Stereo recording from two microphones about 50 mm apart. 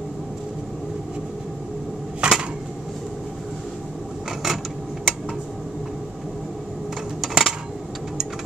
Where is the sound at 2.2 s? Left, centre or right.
Centre.